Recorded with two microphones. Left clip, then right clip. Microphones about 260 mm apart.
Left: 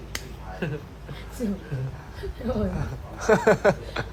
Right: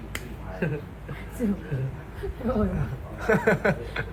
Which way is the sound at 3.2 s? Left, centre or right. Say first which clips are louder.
Left 3 dB; left.